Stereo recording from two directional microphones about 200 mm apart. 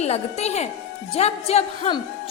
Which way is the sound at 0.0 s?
35° left (ahead or behind).